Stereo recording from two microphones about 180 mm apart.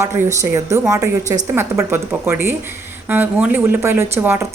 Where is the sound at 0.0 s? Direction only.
15° right (ahead or behind).